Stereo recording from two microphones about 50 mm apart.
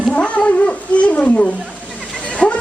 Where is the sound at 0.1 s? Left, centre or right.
Left.